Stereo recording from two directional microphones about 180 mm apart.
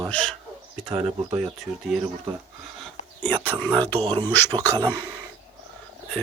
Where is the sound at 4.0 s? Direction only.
25° right (ahead or behind).